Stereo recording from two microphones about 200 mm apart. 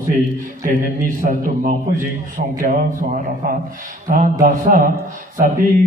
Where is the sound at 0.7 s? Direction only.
40° right (ahead or behind).